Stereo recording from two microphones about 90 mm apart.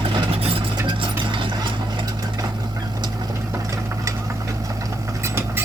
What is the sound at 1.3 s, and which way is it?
Mechanisms, 70° right (ahead or behind).